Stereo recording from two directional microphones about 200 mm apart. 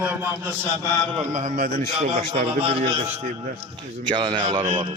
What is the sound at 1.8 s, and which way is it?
A man's voice, 30° right (ahead or behind).